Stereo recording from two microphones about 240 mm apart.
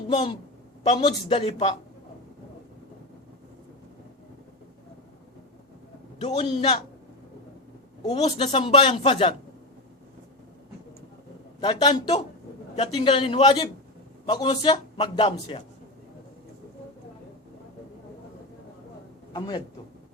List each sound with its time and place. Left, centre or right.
0.1 s a man's voice: left
6.1 s a man's voice: left
8.1 s a man's voice: left
11.6 s a man's voice: centre
19.3 s a man's voice: centre